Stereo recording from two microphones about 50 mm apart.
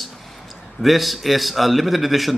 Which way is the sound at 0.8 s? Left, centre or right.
Centre.